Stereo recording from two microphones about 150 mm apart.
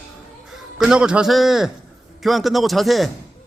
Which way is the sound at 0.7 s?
5° right (ahead or behind).